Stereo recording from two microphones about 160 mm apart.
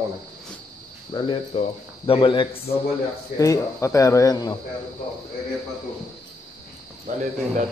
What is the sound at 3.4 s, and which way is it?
Speech, 20° left (ahead or behind).